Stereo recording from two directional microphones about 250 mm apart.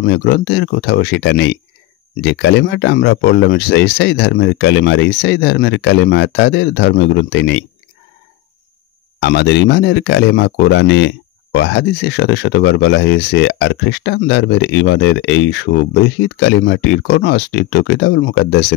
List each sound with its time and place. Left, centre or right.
0.0 s speech: left
9.2 s speech: left